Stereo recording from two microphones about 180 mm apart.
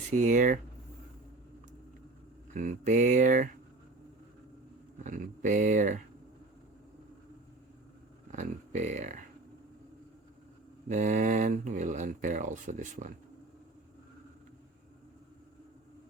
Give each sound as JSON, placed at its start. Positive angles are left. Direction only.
{"t": 0.1, "sound": "speech", "side_deg": -45}
{"t": 2.5, "sound": "speech", "side_deg": -45}
{"t": 5.0, "sound": "speech", "side_deg": -45}
{"t": 8.3, "sound": "speech", "side_deg": -40}
{"t": 10.8, "sound": "speech", "side_deg": -45}